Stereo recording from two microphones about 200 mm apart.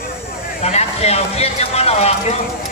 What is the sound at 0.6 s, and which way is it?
A man's voice, 30° left (ahead or behind).